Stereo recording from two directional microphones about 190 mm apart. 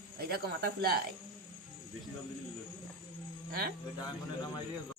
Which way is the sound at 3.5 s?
55° right (ahead or behind).